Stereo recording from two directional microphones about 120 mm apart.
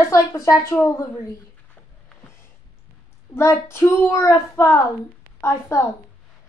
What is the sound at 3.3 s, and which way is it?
A child's voice, 20° left (ahead or behind).